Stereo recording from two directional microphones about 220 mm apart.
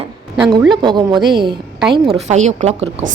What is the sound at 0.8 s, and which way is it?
A woman's voice, 20° right (ahead or behind).